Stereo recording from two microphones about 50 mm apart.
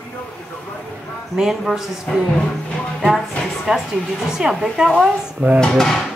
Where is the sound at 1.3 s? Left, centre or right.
Centre.